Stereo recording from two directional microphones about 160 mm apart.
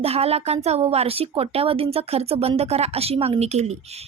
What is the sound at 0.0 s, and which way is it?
A woman's voice, 40° right (ahead or behind).